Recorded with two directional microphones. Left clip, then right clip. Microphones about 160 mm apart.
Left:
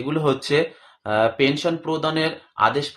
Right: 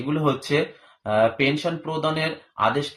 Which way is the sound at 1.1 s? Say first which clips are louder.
Left 1 dB; 15° left (ahead or behind).